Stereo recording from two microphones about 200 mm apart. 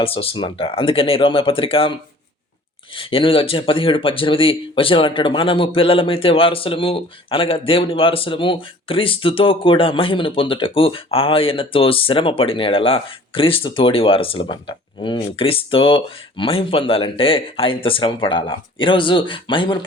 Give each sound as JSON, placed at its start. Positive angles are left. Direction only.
{"t": 0.0, "sound": "speech", "side_deg": 30}
{"t": 2.9, "sound": "speech", "side_deg": 25}